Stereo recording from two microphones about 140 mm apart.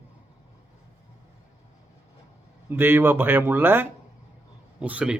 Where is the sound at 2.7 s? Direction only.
15° right (ahead or behind).